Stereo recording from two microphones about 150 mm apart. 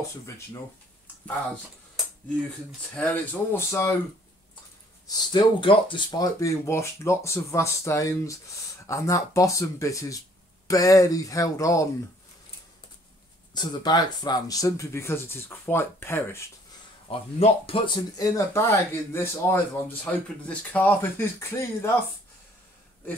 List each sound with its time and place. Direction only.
3.0 s speech: 15° left (ahead or behind)
5.0 s speech: 25° left (ahead or behind)
6.4 s speech: 20° left (ahead or behind)
13.6 s speech: 30° left (ahead or behind)
17.1 s speech: 40° left (ahead or behind); by 21.9 s 20° left (ahead or behind)